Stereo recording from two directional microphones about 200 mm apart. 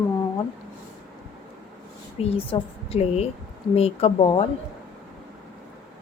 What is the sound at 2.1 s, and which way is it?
A woman's voice, 30° left (ahead or behind).